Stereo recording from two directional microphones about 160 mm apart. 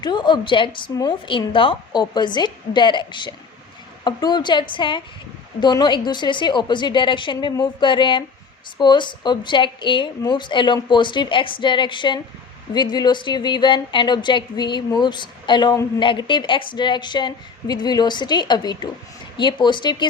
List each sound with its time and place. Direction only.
0.0 s a woman's voice: 25° left (ahead or behind)